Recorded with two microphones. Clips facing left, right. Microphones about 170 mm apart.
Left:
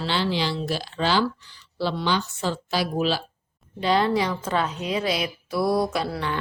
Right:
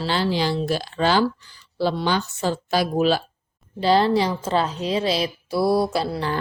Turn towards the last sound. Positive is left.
turn(degrees=-35)  # may be behind; listen again after turning